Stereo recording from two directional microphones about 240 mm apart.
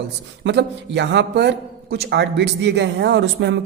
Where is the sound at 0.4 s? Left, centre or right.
Right.